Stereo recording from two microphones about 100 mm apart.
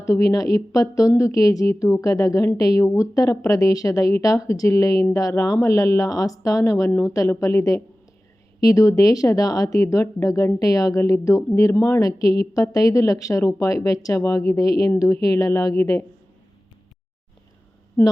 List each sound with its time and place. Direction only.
0.0 s speech: 35° left (ahead or behind)
11.7 s speech: 25° left (ahead or behind)
11.9 s speech: 35° left (ahead or behind)
18.0 s speech: 20° left (ahead or behind)